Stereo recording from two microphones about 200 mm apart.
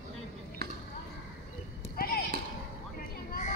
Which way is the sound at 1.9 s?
50° left (ahead or behind).